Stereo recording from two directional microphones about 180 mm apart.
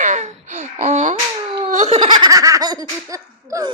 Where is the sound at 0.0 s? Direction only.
40° right (ahead or behind).